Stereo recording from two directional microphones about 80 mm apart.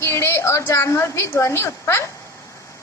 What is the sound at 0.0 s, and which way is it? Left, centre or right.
A woman's voice, left.